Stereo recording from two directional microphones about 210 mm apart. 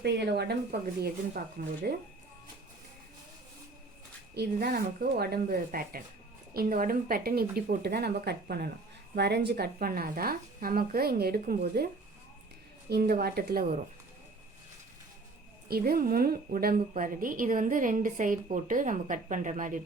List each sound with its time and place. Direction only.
0.0 s a woman's voice: 50° right (ahead or behind)
4.4 s a woman's voice: 50° right (ahead or behind)
12.9 s a woman's voice: 50° right (ahead or behind)
15.7 s a woman's voice: 45° right (ahead or behind)